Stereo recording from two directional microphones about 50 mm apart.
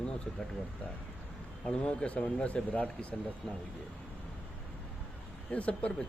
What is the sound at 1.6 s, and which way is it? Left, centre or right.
Speech, left.